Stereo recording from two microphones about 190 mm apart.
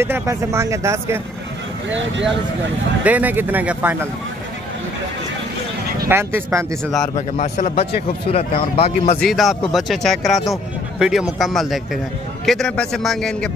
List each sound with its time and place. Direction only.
0.0 s speech: 15° right (ahead or behind)
1.9 s speech: 75° right (ahead or behind)
3.0 s speech: 10° right (ahead or behind)
6.0 s speech: 10° right (ahead or behind)
7.2 s speech: 35° left (ahead or behind)
9.2 s speech: centre (ahead or behind)